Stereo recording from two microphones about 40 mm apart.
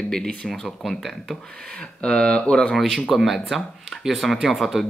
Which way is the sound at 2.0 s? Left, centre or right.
Left.